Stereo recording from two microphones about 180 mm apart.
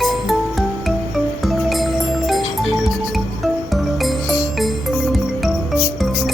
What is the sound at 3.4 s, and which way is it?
Music, centre (ahead or behind).